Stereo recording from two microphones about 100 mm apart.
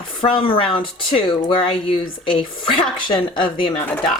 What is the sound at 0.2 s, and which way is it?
Speech, 55° left (ahead or behind).